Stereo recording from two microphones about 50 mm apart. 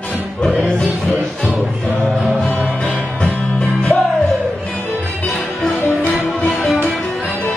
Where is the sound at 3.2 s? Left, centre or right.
Left.